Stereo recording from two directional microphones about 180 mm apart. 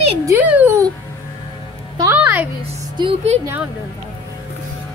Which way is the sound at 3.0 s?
25° right (ahead or behind).